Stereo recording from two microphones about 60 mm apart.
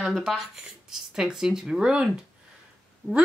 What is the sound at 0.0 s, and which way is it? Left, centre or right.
A woman's voice, centre.